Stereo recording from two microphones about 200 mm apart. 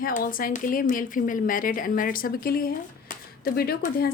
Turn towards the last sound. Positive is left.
turn(degrees=45)  # may be behind; listen again after turning